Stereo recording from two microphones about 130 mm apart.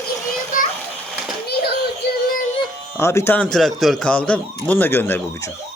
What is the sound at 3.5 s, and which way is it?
A man's voice, centre (ahead or behind).